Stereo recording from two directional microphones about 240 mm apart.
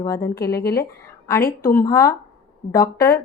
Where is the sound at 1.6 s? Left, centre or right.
Centre.